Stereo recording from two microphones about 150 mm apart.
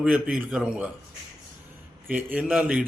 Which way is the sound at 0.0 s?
5° right (ahead or behind).